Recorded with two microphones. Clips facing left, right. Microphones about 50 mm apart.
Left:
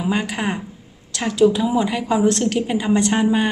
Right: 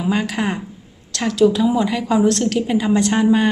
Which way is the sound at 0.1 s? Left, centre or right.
Centre.